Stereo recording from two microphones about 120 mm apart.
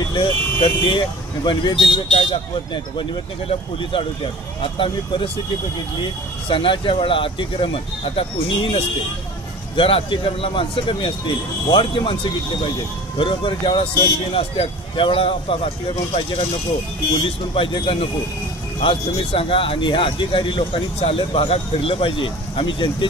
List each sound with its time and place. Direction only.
0.0 s speech: 40° left (ahead or behind)
13.2 s speech: 45° left (ahead or behind)